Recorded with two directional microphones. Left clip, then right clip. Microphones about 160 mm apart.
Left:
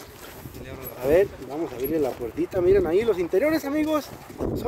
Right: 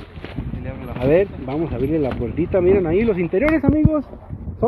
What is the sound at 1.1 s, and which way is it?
Speech, 25° left (ahead or behind).